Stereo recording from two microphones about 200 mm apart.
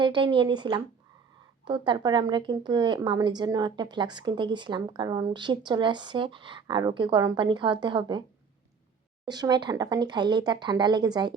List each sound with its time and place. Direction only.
0.0 s a woman's voice: 25° right (ahead or behind)
9.2 s a woman's voice: 20° right (ahead or behind)